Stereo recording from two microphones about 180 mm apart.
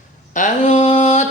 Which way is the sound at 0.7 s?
35° left (ahead or behind).